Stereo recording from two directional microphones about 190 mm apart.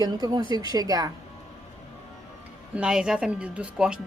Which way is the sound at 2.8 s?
5° right (ahead or behind).